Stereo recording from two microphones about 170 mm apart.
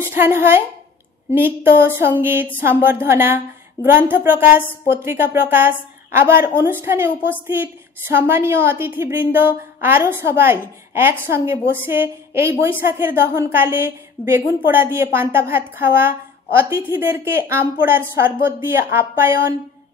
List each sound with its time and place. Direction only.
0.0 s a woman's voice: 15° right (ahead or behind)